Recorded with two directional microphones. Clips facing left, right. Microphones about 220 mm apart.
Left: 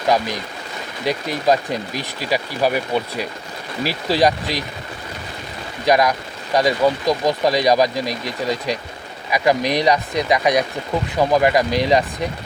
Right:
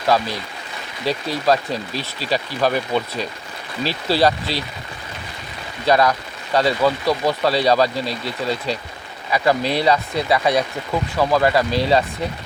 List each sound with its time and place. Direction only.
0.1 s speech: 15° left (ahead or behind)
5.8 s speech: 15° left (ahead or behind)